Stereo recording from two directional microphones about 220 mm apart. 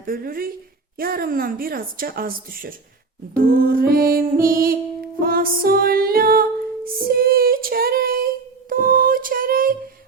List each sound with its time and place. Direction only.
0.0 s speech: 40° right (ahead or behind)
3.3 s music: 40° right (ahead or behind)